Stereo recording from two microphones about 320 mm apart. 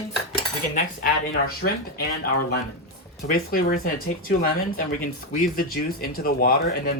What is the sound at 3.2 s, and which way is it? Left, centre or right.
Speech, left.